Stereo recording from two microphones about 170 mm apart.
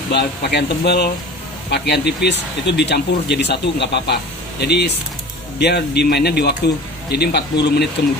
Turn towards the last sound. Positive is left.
turn(degrees=75)  # may be behind; listen again after turning